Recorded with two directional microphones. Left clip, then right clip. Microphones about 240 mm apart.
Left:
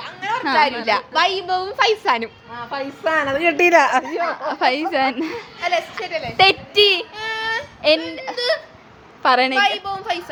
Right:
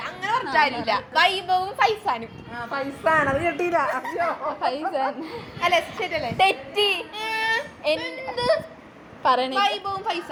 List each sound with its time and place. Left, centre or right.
0.0 s a sound: centre
0.5 s a woman's voice: centre
5.5 s a woman's voice: centre
6.3 s a woman's voice: left
7.2 s child singing: centre
7.8 s a sound: left
9.2 s a woman's voice: left